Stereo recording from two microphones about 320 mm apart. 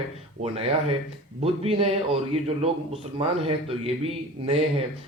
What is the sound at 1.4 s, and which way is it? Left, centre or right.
A man's voice, centre.